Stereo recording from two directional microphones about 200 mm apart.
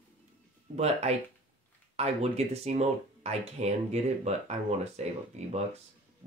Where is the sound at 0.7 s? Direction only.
35° right (ahead or behind).